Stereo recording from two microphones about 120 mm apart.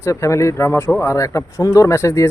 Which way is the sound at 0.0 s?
25° left (ahead or behind).